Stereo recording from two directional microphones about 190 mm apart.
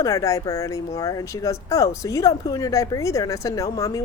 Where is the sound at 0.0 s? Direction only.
15° left (ahead or behind).